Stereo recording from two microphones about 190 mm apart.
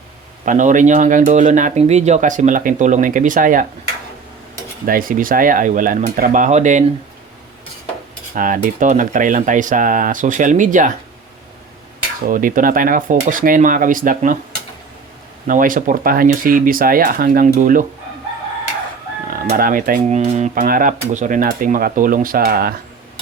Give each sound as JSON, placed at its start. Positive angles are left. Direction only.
{"t": 0.4, "sound": "speech", "side_deg": -40}
{"t": 4.9, "sound": "speech", "side_deg": -50}
{"t": 8.4, "sound": "speech", "side_deg": -45}
{"t": 12.3, "sound": "speech", "side_deg": -45}
{"t": 15.4, "sound": "speech", "side_deg": -45}
{"t": 19.3, "sound": "speech", "side_deg": -50}